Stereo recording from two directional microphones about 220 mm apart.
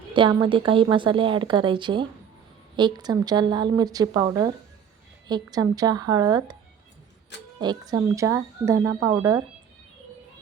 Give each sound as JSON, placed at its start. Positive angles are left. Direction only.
{"t": 0.1, "sound": "a woman's voice", "side_deg": -20}
{"t": 7.6, "sound": "speech", "side_deg": -20}